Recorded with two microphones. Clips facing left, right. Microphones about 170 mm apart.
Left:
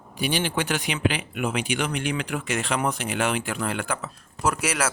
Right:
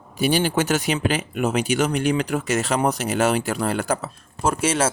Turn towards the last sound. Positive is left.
turn(degrees=-25)  # may be behind; listen again after turning